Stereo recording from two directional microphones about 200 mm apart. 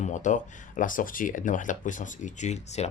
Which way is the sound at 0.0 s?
40° left (ahead or behind).